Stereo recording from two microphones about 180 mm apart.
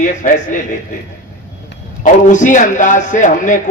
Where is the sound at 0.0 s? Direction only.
45° left (ahead or behind).